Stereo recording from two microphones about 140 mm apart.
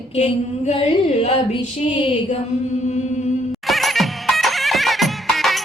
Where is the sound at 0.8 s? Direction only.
50° left (ahead or behind).